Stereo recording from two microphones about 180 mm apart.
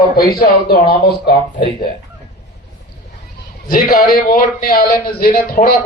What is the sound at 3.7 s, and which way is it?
A man's voice, 55° left (ahead or behind).